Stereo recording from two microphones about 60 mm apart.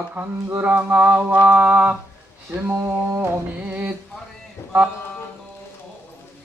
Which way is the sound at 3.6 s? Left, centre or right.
Right.